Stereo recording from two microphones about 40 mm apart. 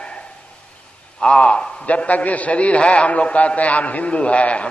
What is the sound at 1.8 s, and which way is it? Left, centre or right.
A man's voice, left.